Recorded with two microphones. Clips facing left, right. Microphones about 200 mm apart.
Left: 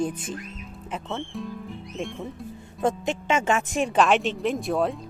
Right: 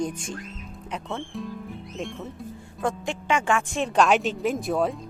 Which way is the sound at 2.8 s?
20° left (ahead or behind).